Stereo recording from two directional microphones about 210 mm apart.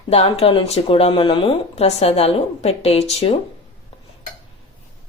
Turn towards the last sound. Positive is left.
turn(degrees=30)  # may be behind; listen again after turning